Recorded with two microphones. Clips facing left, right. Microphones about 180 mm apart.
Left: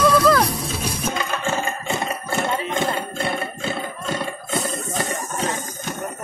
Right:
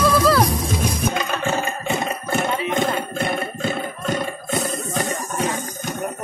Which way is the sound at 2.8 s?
15° right (ahead or behind).